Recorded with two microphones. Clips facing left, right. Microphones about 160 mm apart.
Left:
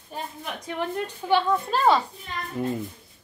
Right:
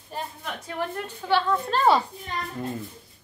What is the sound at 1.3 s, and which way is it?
Speech, 15° left (ahead or behind).